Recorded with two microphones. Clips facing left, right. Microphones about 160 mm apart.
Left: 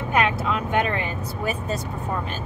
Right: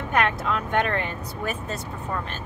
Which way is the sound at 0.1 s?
10° left (ahead or behind).